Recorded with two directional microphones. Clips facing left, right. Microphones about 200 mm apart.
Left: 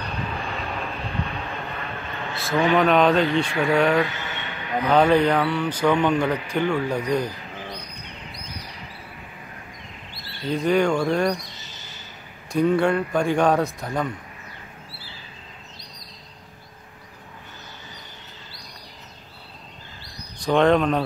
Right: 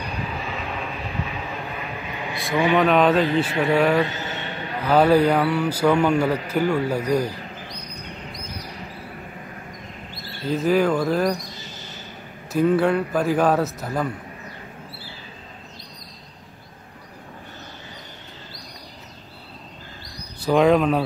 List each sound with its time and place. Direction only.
0.0 s vehicle: 5° right (ahead or behind)
2.7 s a man's voice: centre (ahead or behind)
4.0 s train: 35° right (ahead or behind)
4.8 s a man's voice: 5° right (ahead or behind)
7.6 s bird: 40° right (ahead or behind)
10.4 s speech: 5° right (ahead or behind)
12.5 s speech: 5° right (ahead or behind)
20.3 s speech: 5° right (ahead or behind)